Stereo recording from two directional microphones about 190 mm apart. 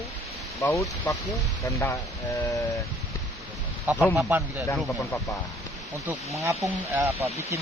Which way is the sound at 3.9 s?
10° right (ahead or behind).